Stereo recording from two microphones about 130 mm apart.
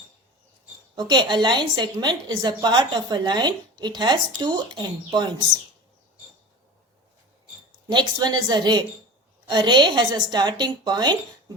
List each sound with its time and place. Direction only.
0.9 s a woman's voice: 35° right (ahead or behind)
7.9 s a woman's voice: 35° right (ahead or behind)